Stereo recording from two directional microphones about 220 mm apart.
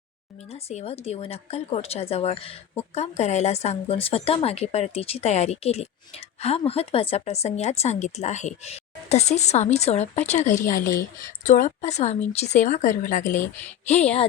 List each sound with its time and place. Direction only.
0.4 s a woman's voice: 30° left (ahead or behind)